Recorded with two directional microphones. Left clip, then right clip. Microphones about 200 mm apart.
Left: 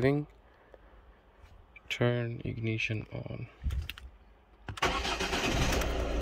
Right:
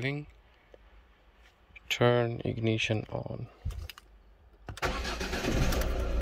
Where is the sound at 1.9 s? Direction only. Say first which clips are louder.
Right 6 dB; 10° left (ahead or behind).